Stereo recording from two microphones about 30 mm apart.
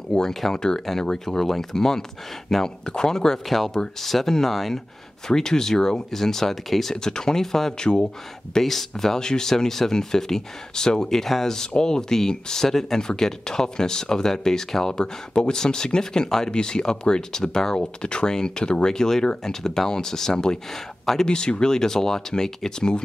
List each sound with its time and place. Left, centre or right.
0.3 s speech: centre
0.6 s speech: left
1.2 s speech: centre
3.4 s speech: centre
5.3 s speech: centre
7.0 s speech: left
13.0 s speech: left
17.7 s speech: left
18.9 s speech: centre
21.0 s a sound: centre
21.3 s speech: left